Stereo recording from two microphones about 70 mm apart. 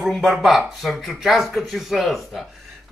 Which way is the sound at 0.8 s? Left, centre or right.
Centre.